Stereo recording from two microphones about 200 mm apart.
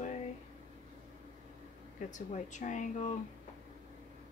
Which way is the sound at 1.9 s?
40° left (ahead or behind).